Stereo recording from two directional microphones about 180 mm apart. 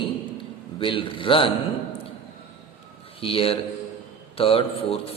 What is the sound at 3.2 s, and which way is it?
A man's voice, 30° left (ahead or behind).